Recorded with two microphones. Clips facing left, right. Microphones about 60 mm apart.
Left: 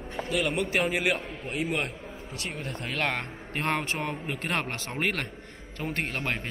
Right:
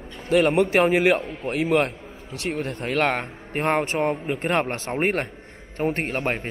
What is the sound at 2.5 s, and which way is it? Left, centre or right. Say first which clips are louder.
Speech: right 12 dB; right.